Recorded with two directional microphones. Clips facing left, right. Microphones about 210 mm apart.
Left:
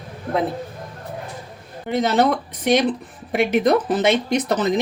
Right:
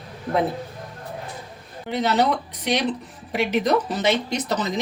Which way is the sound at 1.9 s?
50° left (ahead or behind).